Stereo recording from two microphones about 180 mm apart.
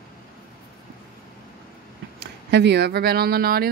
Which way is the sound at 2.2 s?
70° right (ahead or behind).